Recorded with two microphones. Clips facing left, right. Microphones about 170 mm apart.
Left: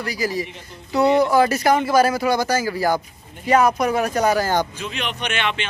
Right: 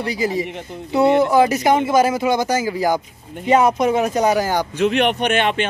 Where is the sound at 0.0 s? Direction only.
25° right (ahead or behind).